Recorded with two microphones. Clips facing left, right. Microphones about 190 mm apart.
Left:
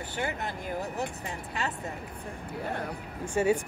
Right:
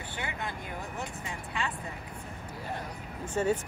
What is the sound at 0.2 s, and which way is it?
Speech, 40° left (ahead or behind).